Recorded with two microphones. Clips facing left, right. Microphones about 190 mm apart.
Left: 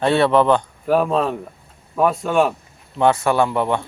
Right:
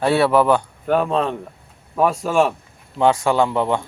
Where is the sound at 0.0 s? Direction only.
10° right (ahead or behind).